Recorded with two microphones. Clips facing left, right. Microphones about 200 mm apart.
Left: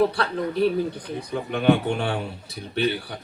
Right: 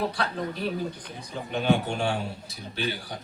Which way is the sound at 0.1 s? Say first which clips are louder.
Left 5 dB; 60° left (ahead or behind).